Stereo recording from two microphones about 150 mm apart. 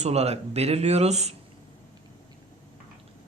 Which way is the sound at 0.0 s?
45° right (ahead or behind).